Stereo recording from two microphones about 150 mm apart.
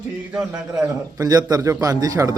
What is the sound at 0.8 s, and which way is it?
Speech, 25° right (ahead or behind).